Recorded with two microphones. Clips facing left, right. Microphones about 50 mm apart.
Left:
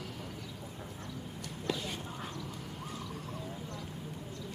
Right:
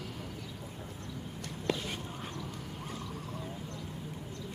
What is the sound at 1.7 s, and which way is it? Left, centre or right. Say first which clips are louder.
Whispering: right 2 dB; right.